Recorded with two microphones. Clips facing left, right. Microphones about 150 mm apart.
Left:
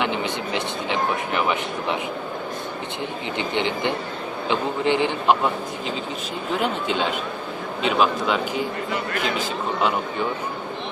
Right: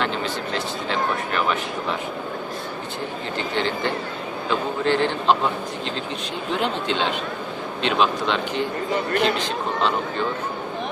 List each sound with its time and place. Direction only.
0.0 s speech: 15° left (ahead or behind)
3.3 s speech: 20° left (ahead or behind)
6.6 s speech: 10° left (ahead or behind)